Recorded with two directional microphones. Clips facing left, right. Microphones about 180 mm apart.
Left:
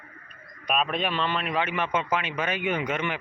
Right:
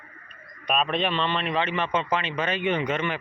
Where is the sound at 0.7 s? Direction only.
5° left (ahead or behind).